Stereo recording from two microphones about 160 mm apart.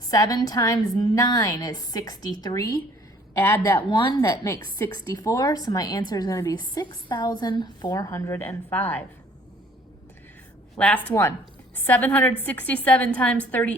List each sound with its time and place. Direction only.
0.1 s a woman's voice: 20° left (ahead or behind)
10.8 s a woman's voice: 10° left (ahead or behind)